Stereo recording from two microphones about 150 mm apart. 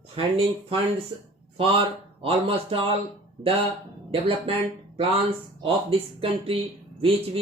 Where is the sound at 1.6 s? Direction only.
40° right (ahead or behind).